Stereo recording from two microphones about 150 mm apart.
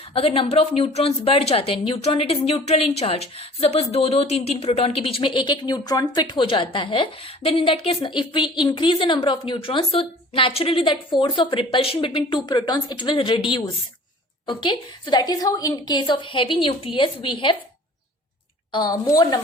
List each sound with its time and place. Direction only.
0.1 s speech: 40° left (ahead or behind)
18.7 s a woman's voice: 30° left (ahead or behind)